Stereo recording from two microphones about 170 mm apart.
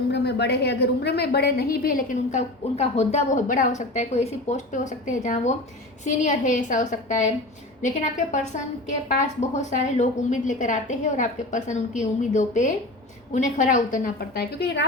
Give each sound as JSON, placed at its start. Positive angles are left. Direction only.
{"t": 0.1, "sound": "a woman's voice", "side_deg": 80}
{"t": 2.7, "sound": "a woman's voice", "side_deg": 40}